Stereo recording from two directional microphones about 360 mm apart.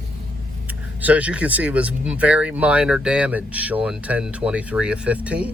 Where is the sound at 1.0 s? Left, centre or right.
Centre.